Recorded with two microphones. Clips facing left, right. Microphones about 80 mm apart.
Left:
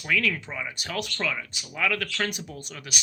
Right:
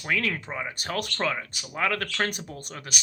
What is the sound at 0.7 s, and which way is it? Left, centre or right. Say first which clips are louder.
Speech: right 1 dB; right.